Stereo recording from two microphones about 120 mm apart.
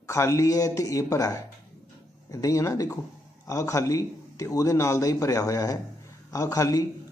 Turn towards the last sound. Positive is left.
turn(degrees=30)  # may be behind; listen again after turning